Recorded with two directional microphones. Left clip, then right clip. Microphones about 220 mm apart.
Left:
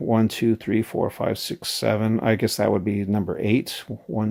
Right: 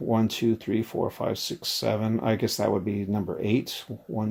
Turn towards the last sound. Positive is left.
turn(degrees=35)  # may be behind; listen again after turning